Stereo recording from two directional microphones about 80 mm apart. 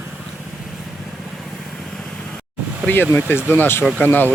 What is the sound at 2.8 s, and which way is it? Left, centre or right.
Speech, left.